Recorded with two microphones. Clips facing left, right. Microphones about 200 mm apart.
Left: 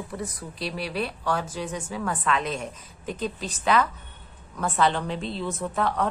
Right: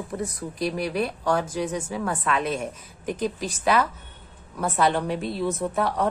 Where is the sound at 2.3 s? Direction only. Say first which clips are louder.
Right 2 dB; 10° right (ahead or behind).